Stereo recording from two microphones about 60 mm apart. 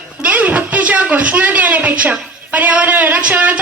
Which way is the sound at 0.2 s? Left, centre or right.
Right.